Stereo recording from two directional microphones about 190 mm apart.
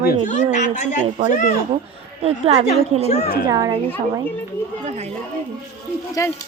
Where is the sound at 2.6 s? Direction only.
35° left (ahead or behind).